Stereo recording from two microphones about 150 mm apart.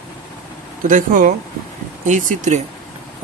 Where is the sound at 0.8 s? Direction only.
60° right (ahead or behind).